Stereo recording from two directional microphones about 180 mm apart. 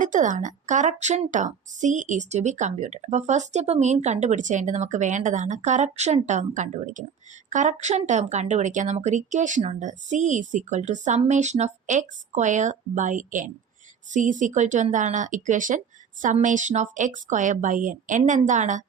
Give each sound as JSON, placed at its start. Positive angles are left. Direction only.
{"t": 0.0, "sound": "a woman's voice", "side_deg": -45}